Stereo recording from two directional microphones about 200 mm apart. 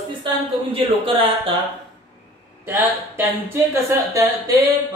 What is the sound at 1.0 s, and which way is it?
Mantra, 30° right (ahead or behind).